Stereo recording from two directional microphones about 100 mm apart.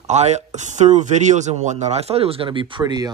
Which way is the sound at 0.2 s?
90° right.